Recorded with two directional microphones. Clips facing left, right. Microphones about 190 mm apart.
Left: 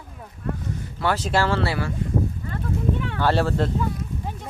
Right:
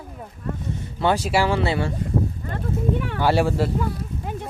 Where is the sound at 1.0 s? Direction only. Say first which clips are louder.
Right 2 dB; 20° right (ahead or behind).